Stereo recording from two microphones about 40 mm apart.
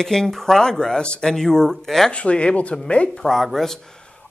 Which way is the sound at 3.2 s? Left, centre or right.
Centre.